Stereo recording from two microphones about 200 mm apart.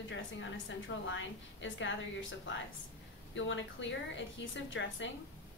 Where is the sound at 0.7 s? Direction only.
70° left (ahead or behind).